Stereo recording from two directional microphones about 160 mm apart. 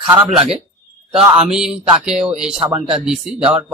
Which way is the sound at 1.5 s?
5° right (ahead or behind).